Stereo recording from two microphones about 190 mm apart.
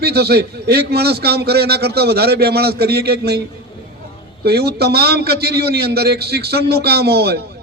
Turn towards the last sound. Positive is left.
turn(degrees=-60)  # may be behind; listen again after turning